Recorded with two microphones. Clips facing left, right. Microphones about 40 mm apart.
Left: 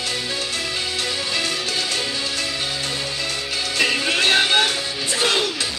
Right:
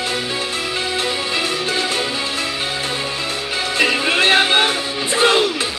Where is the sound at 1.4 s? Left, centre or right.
Centre.